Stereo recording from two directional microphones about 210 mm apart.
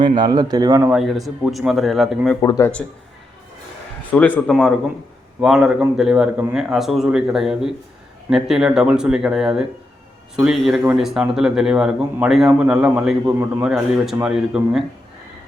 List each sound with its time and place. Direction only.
0.0 s speech: 20° right (ahead or behind)
0.9 s speech: centre (ahead or behind)
2.4 s speech: 15° left (ahead or behind)
4.1 s speech: 5° left (ahead or behind)